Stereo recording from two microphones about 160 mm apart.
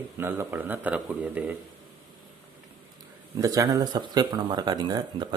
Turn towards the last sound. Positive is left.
turn(degrees=-25)  # may be behind; listen again after turning